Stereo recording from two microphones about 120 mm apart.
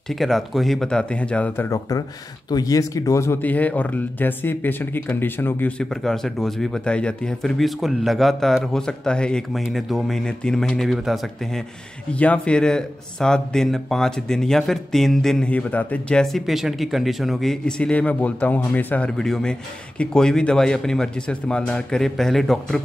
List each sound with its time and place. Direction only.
0.1 s speech: centre (ahead or behind)
1.7 s speech: 30° left (ahead or behind)
5.8 s speech: 5° left (ahead or behind)